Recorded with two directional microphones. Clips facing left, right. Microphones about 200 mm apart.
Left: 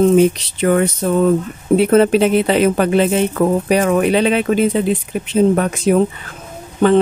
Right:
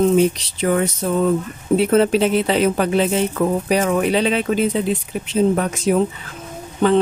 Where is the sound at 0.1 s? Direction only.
60° left (ahead or behind).